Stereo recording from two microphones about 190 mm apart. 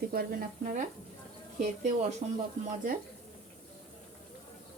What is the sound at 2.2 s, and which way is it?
Speech, 35° right (ahead or behind).